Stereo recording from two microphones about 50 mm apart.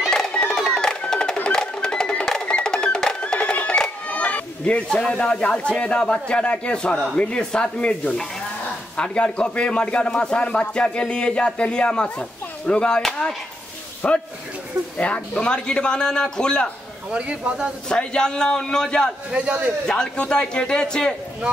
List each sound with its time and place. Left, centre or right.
0.1 s music: centre
4.2 s a sound: left
5.0 s a man's voice: centre
14.0 s a man's voice: left
17.1 s a man's voice: right
17.8 s a man's voice: centre
19.3 s a man's voice: right
20.2 s a man's voice: centre